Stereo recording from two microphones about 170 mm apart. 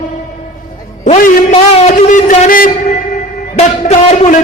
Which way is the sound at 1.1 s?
40° left (ahead or behind).